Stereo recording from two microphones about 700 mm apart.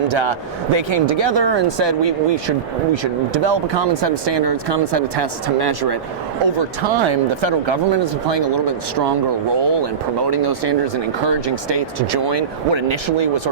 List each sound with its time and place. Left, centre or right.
0.1 s speech: right